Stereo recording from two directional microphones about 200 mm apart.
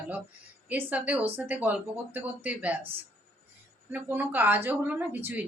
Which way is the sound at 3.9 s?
10° right (ahead or behind).